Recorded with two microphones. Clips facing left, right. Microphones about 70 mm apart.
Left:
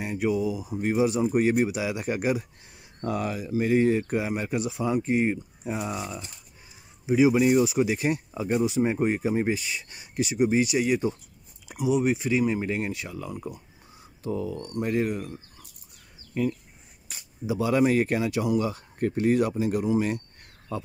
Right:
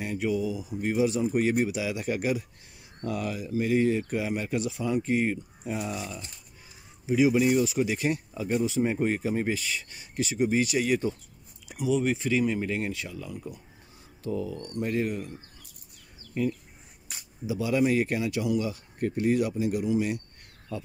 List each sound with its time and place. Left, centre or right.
0.0 s speech: left
13.1 s speech: left
14.7 s speech: left
17.5 s speech: left